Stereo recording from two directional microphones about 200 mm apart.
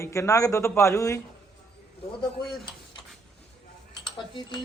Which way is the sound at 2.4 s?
Centre (ahead or behind).